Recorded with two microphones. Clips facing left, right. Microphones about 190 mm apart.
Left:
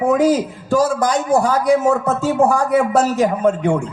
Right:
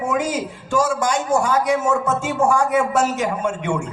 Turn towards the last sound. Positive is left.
turn(degrees=35)  # may be behind; listen again after turning